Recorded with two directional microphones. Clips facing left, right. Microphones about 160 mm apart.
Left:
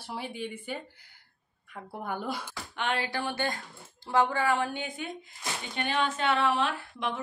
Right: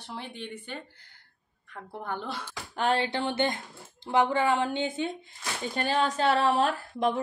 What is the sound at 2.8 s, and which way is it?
Speech, 35° right (ahead or behind).